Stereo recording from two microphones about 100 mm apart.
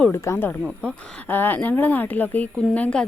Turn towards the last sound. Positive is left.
turn(degrees=10)  # may be behind; listen again after turning